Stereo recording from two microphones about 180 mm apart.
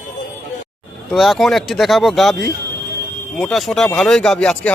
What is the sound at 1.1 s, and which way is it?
Speech, centre (ahead or behind).